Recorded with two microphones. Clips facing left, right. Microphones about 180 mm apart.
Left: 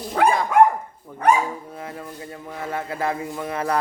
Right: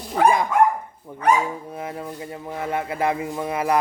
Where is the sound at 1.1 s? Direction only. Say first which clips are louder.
Left 1 dB; 20° right (ahead or behind).